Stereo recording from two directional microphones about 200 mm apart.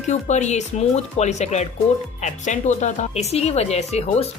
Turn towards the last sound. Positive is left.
turn(degrees=30)  # may be behind; listen again after turning